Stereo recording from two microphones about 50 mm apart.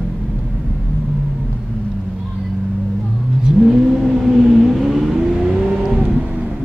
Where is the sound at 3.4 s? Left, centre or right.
Centre.